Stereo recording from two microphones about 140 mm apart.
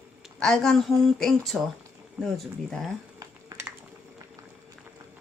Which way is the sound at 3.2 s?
25° right (ahead or behind).